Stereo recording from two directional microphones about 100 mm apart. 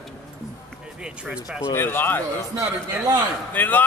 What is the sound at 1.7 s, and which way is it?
Speech, 20° left (ahead or behind).